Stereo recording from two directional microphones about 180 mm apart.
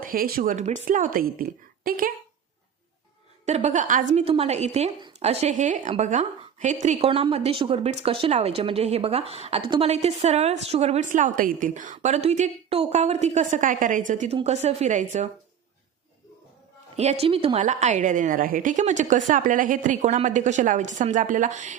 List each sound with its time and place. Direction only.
0.0 s a woman's voice: 55° right (ahead or behind)
3.4 s a woman's voice: 40° right (ahead or behind)
17.0 s a woman's voice: 35° right (ahead or behind)